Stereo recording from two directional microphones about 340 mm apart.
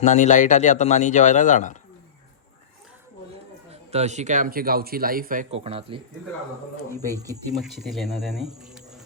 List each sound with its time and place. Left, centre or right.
0.0 s speech: left
3.7 s speech: centre
7.0 s speech: centre